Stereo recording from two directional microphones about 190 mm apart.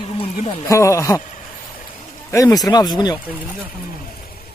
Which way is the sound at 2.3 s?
20° left (ahead or behind).